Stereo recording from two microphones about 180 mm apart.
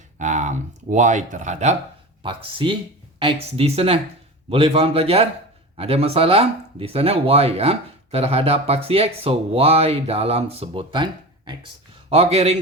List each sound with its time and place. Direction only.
0.2 s speech: 40° right (ahead or behind)
2.2 s speech: 30° right (ahead or behind)